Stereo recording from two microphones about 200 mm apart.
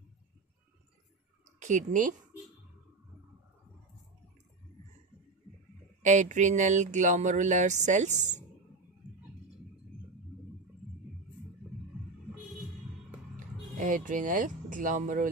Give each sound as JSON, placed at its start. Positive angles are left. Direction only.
{"t": 1.6, "sound": "speech", "side_deg": -40}
{"t": 6.0, "sound": "a sound", "side_deg": -35}
{"t": 13.4, "sound": "speech", "side_deg": -40}